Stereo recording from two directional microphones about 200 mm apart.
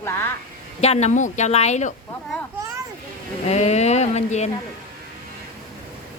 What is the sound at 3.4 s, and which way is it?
Speech, 35° left (ahead or behind).